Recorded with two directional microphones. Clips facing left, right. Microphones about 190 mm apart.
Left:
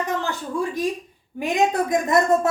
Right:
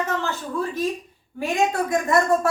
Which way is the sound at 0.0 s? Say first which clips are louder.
Even; 15° left (ahead or behind).